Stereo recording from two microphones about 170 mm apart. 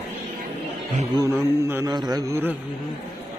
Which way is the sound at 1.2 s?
15° right (ahead or behind).